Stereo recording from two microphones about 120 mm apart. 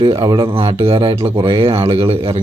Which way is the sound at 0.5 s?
45° right (ahead or behind).